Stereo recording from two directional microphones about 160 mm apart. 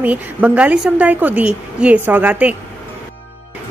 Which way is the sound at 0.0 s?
10° right (ahead or behind).